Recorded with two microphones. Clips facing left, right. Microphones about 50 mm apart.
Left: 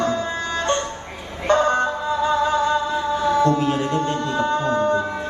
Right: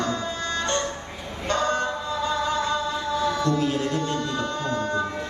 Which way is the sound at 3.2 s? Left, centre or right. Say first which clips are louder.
Left 6 dB; left.